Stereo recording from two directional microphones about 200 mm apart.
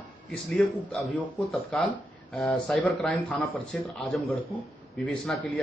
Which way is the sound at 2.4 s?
5° left (ahead or behind).